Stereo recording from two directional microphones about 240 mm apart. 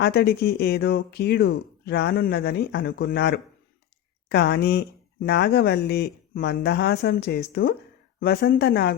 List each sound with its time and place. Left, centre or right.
0.0 s speech: left